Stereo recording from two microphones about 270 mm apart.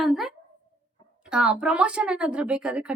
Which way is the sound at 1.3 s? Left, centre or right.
Centre.